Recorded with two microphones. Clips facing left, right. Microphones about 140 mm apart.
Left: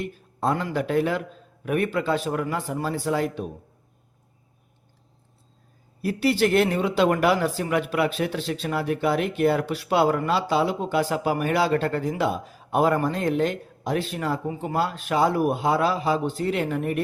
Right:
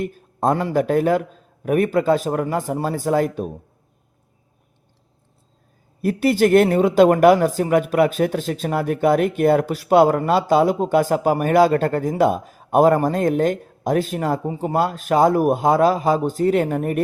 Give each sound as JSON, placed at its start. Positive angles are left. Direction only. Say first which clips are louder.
{"t": 0.0, "sound": "speech", "louder": "right 5 dB", "side_deg": -45}
{"t": 6.0, "sound": "speech", "louder": "right 5 dB", "side_deg": -45}